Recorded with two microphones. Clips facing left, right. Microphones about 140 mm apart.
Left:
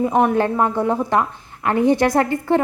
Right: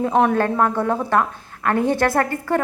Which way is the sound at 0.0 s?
5° left (ahead or behind).